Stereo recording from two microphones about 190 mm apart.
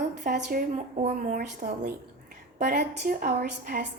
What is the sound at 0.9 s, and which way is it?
Speech, 35° right (ahead or behind).